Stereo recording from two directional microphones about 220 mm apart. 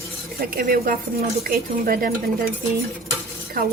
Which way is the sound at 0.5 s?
40° right (ahead or behind).